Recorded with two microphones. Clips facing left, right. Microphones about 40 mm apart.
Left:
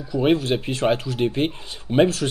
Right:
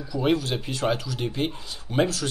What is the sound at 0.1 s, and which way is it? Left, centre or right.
Speech, left.